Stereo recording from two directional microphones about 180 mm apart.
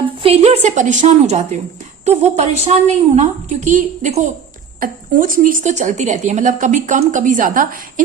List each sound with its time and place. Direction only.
0.0 s a woman's voice: 30° right (ahead or behind); by 8.0 s 45° right (ahead or behind)